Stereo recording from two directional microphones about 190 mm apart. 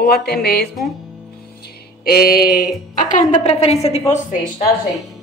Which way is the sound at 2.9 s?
45° left (ahead or behind).